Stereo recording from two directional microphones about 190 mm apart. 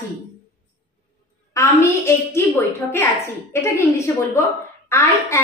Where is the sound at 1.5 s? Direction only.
15° left (ahead or behind).